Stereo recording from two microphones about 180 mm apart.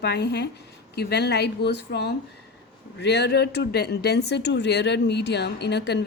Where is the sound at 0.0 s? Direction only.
70° left (ahead or behind).